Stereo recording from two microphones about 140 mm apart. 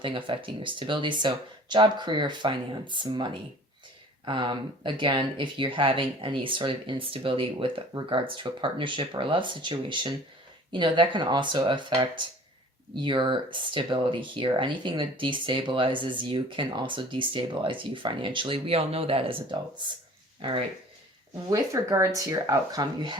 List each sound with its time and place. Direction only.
0.0 s speech: 35° right (ahead or behind)
21.5 s speech: 25° right (ahead or behind)